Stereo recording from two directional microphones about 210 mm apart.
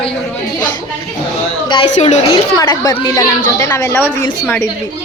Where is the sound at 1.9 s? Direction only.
30° left (ahead or behind); by 4.1 s 10° left (ahead or behind).